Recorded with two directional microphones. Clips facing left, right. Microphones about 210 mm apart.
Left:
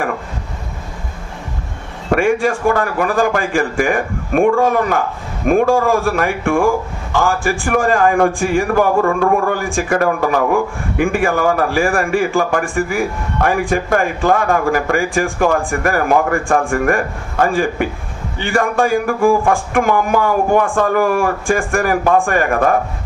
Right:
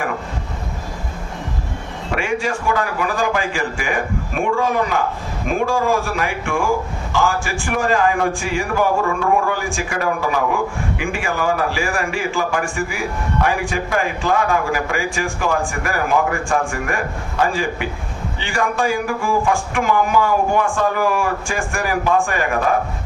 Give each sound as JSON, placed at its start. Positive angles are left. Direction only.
{"t": 2.0, "sound": "a man's voice", "side_deg": 50}